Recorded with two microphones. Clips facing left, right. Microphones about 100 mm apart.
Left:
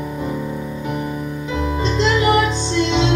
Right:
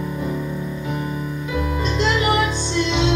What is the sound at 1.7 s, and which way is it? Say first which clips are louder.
Music: left 3 dB; 25° left (ahead or behind).